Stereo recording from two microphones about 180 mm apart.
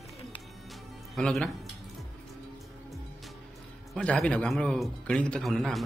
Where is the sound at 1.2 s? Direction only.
Centre (ahead or behind).